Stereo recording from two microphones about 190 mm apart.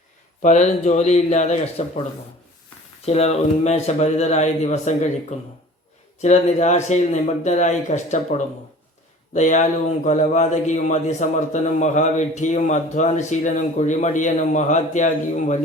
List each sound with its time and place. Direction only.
0.4 s speech: 40° left (ahead or behind)
3.1 s speech: 35° left (ahead or behind)